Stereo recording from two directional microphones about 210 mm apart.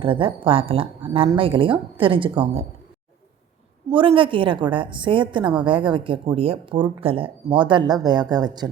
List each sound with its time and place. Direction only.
0.0 s speech: 25° right (ahead or behind)
3.9 s speech: 25° right (ahead or behind)